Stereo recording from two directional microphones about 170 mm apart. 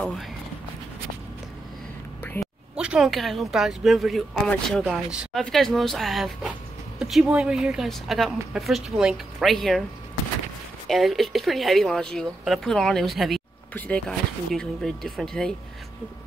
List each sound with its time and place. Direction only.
2.2 s quack: 10° left (ahead or behind)
2.7 s speech: 5° right (ahead or behind)
10.9 s speech: centre (ahead or behind)